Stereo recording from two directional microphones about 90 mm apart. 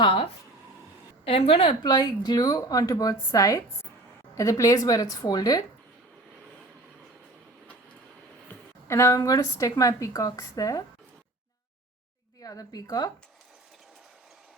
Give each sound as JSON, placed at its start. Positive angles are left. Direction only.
{"t": 0.0, "sound": "speech", "side_deg": 75}
{"t": 1.2, "sound": "a woman's voice", "side_deg": 90}
{"t": 1.8, "sound": "a woman's voice", "side_deg": 50}
{"t": 8.9, "sound": "a woman's voice", "side_deg": 35}
{"t": 12.4, "sound": "a woman's voice", "side_deg": 45}